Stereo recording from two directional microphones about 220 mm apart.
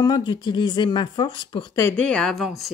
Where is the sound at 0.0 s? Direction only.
20° left (ahead or behind).